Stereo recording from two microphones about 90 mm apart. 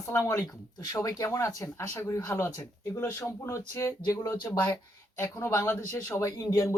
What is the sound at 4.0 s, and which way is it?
Speech, 45° left (ahead or behind).